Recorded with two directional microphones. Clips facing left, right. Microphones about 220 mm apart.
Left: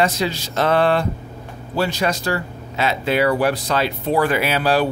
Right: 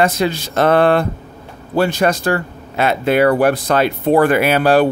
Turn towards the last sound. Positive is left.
turn(degrees=-55)  # may be behind; listen again after turning